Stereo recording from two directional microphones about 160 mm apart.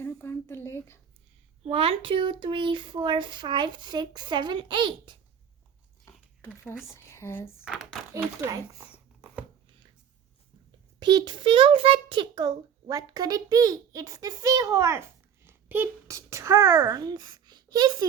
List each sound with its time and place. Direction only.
0.0 s a sound: 15° left (ahead or behind)
1.6 s speech: 35° right (ahead or behind)
6.1 s a sound: 15° left (ahead or behind)
6.9 s speech: 15° left (ahead or behind)
7.6 s speech: 5° right (ahead or behind)
8.1 s speech: 20° right (ahead or behind)
11.0 s a child's voice: 30° right (ahead or behind)